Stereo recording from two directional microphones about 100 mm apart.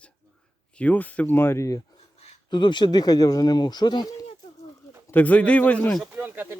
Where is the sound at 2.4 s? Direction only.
50° left (ahead or behind).